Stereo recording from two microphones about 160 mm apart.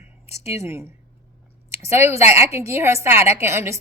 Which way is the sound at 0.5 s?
15° right (ahead or behind).